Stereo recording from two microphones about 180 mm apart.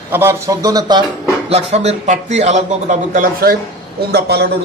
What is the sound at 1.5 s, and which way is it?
Speech, 35° right (ahead or behind).